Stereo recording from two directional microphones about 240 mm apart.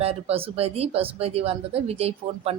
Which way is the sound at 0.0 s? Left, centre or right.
Right.